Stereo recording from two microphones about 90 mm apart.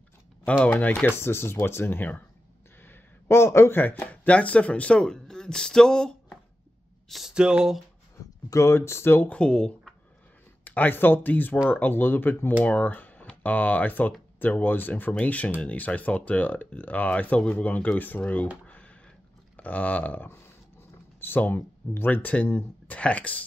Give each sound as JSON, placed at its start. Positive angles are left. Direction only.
{"t": 0.7, "sound": "speech", "side_deg": 20}
{"t": 2.8, "sound": "a sound", "side_deg": 25}
{"t": 3.8, "sound": "speech", "side_deg": 20}
{"t": 7.1, "sound": "speech", "side_deg": -5}
{"t": 8.5, "sound": "speech", "side_deg": 30}
{"t": 9.4, "sound": "speech", "side_deg": 10}
{"t": 19.5, "sound": "speech", "side_deg": 15}